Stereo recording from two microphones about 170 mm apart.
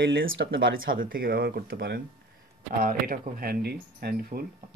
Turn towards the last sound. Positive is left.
turn(degrees=-65)  # may be behind; listen again after turning